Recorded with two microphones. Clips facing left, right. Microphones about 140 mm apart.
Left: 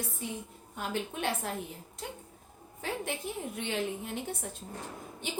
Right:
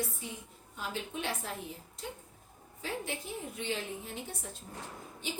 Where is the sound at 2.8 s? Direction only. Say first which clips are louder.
Left 3 dB; 60° left (ahead or behind).